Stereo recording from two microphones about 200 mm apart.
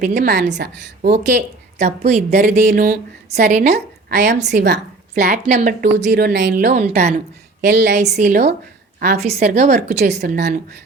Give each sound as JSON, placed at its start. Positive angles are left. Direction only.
{"t": 0.0, "sound": "speech", "side_deg": -50}
{"t": 1.8, "sound": "speech", "side_deg": -35}
{"t": 2.6, "sound": "speech", "side_deg": -50}
{"t": 4.1, "sound": "speech", "side_deg": -55}
{"t": 5.2, "sound": "a woman's voice", "side_deg": -35}
{"t": 6.6, "sound": "speech", "side_deg": -40}
{"t": 7.6, "sound": "speech", "side_deg": -55}
{"t": 7.9, "sound": "speech", "side_deg": -35}
{"t": 9.1, "sound": "speech", "side_deg": -30}
{"t": 10.3, "sound": "a woman's voice", "side_deg": -55}